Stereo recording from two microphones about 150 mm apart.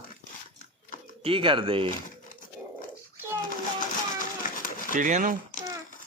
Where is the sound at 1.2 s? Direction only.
35° right (ahead or behind).